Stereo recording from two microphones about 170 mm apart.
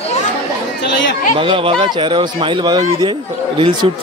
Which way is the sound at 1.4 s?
30° right (ahead or behind).